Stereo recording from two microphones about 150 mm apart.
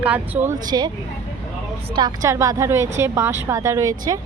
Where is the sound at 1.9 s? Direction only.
30° right (ahead or behind).